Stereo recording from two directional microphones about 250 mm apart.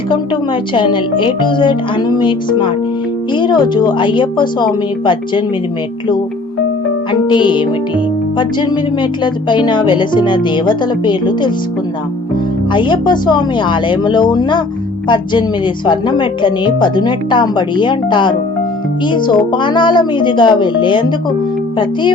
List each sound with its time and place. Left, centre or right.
0.7 s music: centre
7.1 s music: centre
12.7 s music: centre